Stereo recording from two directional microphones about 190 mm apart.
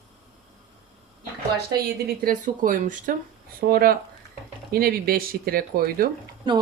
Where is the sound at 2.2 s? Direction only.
45° right (ahead or behind).